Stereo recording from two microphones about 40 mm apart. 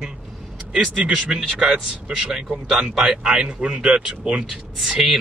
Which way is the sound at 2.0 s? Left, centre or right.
Right.